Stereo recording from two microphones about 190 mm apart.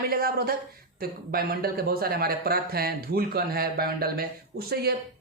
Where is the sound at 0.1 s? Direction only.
50° right (ahead or behind).